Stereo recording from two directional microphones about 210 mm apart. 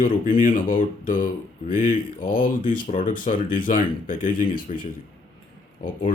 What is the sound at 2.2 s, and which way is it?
Speech, 45° left (ahead or behind).